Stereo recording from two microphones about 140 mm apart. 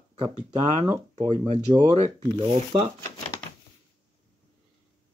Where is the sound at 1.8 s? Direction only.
50° right (ahead or behind).